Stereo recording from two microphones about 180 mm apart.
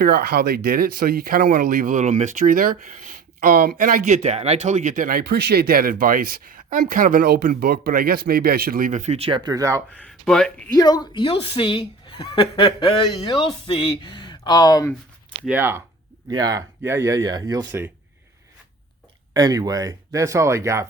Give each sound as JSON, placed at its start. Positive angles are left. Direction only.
{"t": 0.0, "sound": "speech", "side_deg": -60}
{"t": 9.9, "sound": "speech", "side_deg": 5}
{"t": 10.8, "sound": "speech", "side_deg": 20}
{"t": 15.4, "sound": "speech", "side_deg": -10}
{"t": 17.7, "sound": "speech", "side_deg": -10}
{"t": 19.3, "sound": "speech", "side_deg": -20}